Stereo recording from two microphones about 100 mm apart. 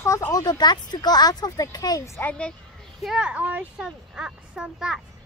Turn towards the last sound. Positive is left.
turn(degrees=-5)  # may be behind; listen again after turning